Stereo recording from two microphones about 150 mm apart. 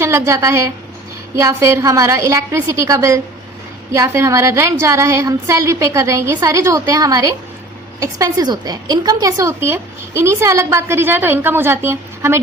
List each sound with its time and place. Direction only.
0.0 s a woman's voice: 20° right (ahead or behind)